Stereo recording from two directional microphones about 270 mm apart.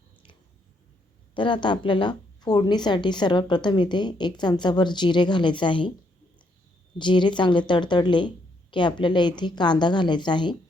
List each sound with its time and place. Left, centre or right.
1.3 s a woman's voice: centre
7.0 s a woman's voice: centre